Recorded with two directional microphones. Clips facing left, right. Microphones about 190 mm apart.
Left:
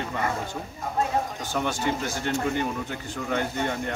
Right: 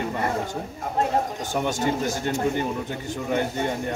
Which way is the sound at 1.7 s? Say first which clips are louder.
Right 5 dB; 45° right (ahead or behind).